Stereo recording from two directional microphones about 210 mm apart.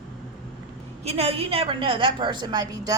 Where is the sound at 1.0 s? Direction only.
30° right (ahead or behind).